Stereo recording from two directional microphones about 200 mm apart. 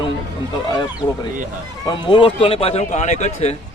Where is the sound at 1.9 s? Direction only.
25° left (ahead or behind).